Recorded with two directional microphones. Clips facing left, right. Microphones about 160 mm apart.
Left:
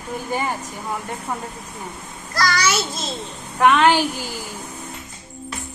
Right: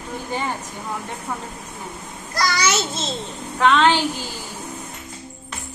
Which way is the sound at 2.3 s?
25° right (ahead or behind).